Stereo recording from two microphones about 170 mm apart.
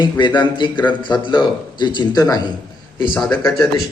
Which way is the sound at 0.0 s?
30° left (ahead or behind).